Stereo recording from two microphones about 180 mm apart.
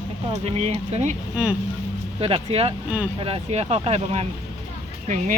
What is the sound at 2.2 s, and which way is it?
Speech, 35° right (ahead or behind).